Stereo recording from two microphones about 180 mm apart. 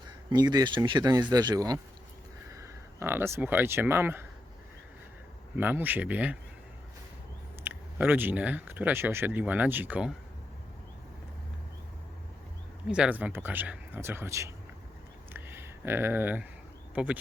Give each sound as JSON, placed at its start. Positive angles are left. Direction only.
{"t": 0.3, "sound": "speech", "side_deg": -20}
{"t": 5.5, "sound": "speech", "side_deg": -10}
{"t": 7.6, "sound": "speech", "side_deg": -10}
{"t": 12.9, "sound": "speech", "side_deg": -5}
{"t": 15.3, "sound": "a sound", "side_deg": -10}
{"t": 16.9, "sound": "speech", "side_deg": -5}